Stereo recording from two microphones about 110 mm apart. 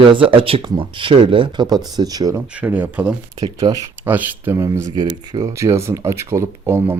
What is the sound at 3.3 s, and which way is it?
Speech, 35° right (ahead or behind).